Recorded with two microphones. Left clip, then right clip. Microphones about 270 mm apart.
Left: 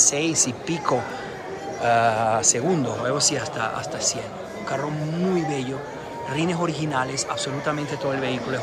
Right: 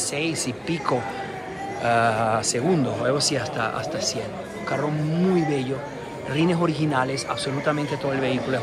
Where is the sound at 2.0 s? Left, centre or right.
Centre.